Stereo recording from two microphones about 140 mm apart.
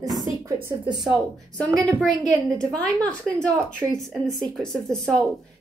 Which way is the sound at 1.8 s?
5° left (ahead or behind).